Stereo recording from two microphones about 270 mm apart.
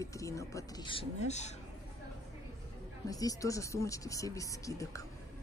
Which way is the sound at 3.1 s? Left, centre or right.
Centre.